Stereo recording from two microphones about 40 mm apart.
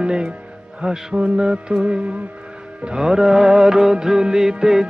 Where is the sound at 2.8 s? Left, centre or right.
Centre.